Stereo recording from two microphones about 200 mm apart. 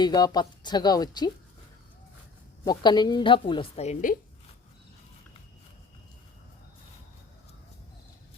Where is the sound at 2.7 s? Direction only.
20° left (ahead or behind).